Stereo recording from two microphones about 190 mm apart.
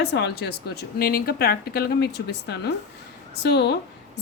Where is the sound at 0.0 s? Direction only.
65° left (ahead or behind).